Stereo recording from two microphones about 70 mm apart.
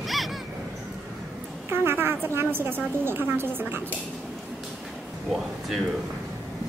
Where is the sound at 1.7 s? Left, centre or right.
Right.